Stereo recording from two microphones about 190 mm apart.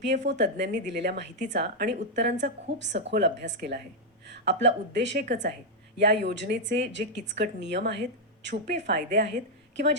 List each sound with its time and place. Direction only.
0.3 s a woman's voice: 65° right (ahead or behind)